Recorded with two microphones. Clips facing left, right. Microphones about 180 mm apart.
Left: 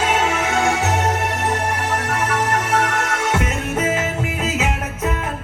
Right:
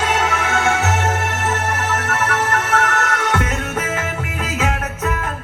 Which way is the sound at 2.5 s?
10° left (ahead or behind).